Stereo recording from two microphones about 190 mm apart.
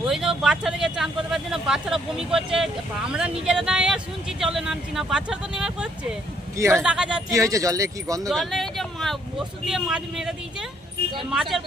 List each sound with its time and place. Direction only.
0.0 s speech: 5° right (ahead or behind)
7.3 s speech: 15° right (ahead or behind)
8.3 s speech: centre (ahead or behind)